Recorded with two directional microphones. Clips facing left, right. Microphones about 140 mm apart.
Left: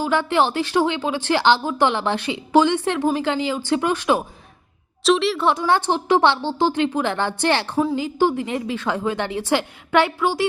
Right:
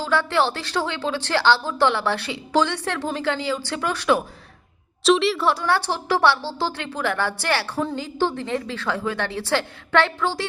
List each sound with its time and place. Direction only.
0.0 s speech: 15° left (ahead or behind)
5.0 s a woman's voice: centre (ahead or behind)
5.4 s a woman's voice: 20° left (ahead or behind)